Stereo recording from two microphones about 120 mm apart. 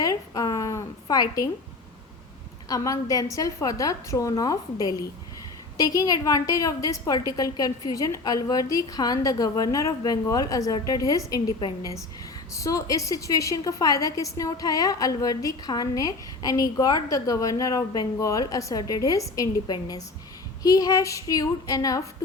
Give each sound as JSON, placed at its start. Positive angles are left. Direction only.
{"t": 0.0, "sound": "a sound", "side_deg": 30}
{"t": 2.6, "sound": "a woman's voice", "side_deg": 30}
{"t": 12.5, "sound": "a woman's voice", "side_deg": 30}